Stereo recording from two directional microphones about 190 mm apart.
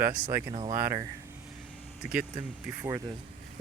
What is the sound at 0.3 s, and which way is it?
Speech, 15° right (ahead or behind).